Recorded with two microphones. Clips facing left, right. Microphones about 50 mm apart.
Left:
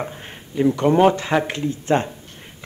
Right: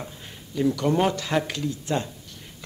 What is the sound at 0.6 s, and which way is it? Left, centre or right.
A man's voice, left.